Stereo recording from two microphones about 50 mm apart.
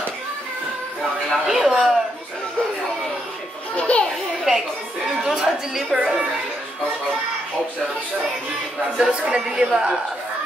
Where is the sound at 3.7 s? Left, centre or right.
Left.